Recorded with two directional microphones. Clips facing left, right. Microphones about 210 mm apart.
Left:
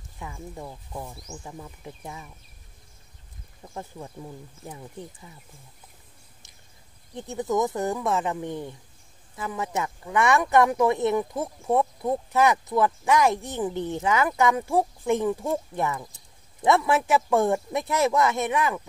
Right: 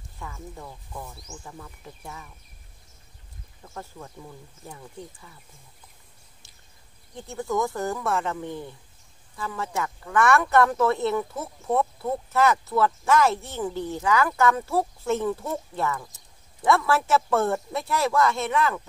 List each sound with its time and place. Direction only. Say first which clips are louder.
0.2 s speech: left 2 dB; 20° left (ahead or behind)
3.6 s speech: left 2 dB; 15° left (ahead or behind)
7.2 s speech: left 2 dB; 20° left (ahead or behind)